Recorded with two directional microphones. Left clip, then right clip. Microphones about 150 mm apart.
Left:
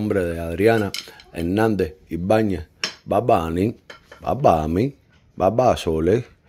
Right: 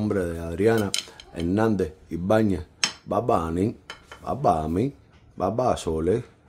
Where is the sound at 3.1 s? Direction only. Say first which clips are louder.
Left 6 dB; 15° left (ahead or behind).